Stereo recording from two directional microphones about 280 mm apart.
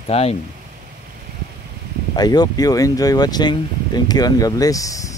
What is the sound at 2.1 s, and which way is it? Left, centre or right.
Speech, centre.